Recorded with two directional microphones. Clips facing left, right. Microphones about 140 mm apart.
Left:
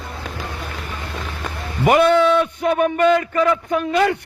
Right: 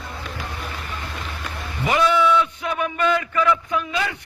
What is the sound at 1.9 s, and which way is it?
A man's voice, 50° left (ahead or behind).